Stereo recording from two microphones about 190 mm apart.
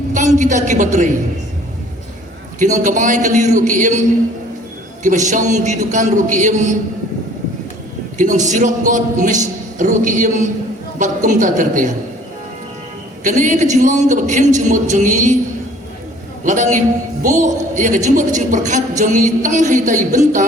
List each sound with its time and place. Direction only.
0.1 s a woman's voice: 40° right (ahead or behind)
2.6 s a man's voice: 40° right (ahead or behind)
5.0 s a man's voice: 40° right (ahead or behind)
8.2 s a man's voice: 40° right (ahead or behind)
13.2 s a man's voice: 40° right (ahead or behind)
16.4 s a man's voice: 40° right (ahead or behind)